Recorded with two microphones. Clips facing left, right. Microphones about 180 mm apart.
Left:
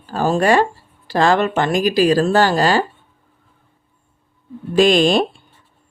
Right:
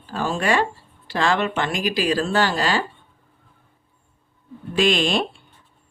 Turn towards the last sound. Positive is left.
turn(degrees=40)  # may be behind; listen again after turning